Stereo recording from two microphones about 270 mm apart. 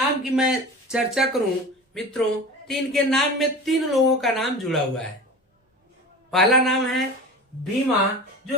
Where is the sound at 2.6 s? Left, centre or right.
Centre.